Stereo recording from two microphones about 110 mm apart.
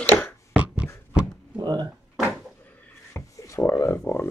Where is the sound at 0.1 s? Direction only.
15° left (ahead or behind).